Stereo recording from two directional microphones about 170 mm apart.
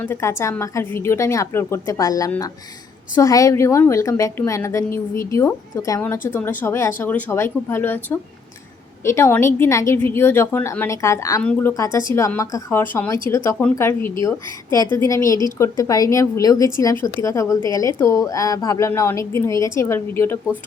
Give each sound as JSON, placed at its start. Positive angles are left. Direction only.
{"t": 0.0, "sound": "a woman's voice", "side_deg": 15}